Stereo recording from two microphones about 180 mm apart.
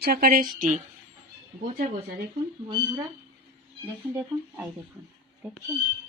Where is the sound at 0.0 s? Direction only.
55° right (ahead or behind).